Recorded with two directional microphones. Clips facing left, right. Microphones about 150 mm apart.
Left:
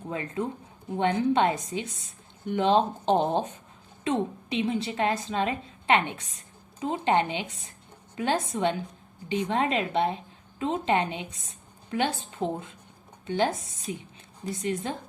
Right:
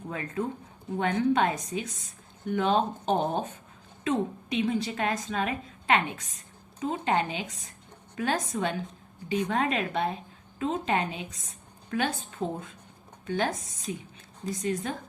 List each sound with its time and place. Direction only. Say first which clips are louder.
0.1 s a woman's voice: left 1 dB; 25° left (ahead or behind)